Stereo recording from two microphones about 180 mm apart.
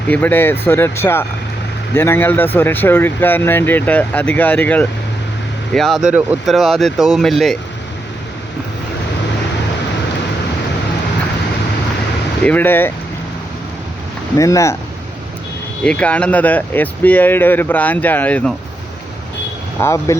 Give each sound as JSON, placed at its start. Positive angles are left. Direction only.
{"t": 0.1, "sound": "speech", "side_deg": 10}
{"t": 12.4, "sound": "speech", "side_deg": 10}
{"t": 14.3, "sound": "speech", "side_deg": 20}
{"t": 15.8, "sound": "speech", "side_deg": 5}
{"t": 19.8, "sound": "speech", "side_deg": 15}